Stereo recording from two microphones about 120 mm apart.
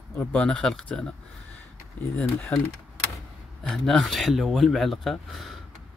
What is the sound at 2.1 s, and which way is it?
Speech, 15° left (ahead or behind).